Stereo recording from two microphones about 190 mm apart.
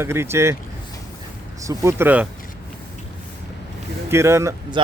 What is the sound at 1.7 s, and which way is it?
Speech, 15° right (ahead or behind).